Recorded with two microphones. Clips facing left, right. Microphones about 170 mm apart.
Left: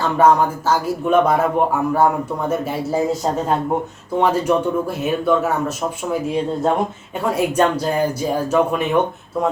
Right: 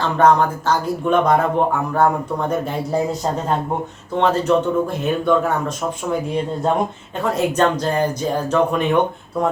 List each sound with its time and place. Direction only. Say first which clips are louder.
0.2 s speech: even; 10° left (ahead or behind)
4.2 s speech: even; 10° left (ahead or behind)